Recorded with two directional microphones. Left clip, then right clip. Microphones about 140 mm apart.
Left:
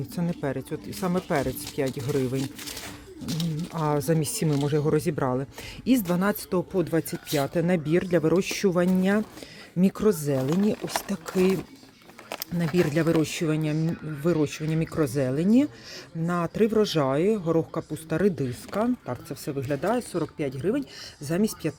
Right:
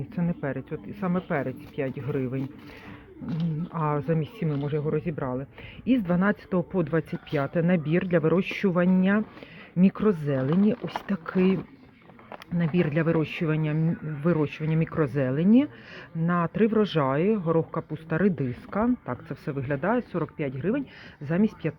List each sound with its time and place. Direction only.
0.2 s speech: 35° left (ahead or behind)
4.1 s speech: 60° left (ahead or behind)
4.6 s speech: 75° left (ahead or behind)
6.1 s speech: 25° left (ahead or behind)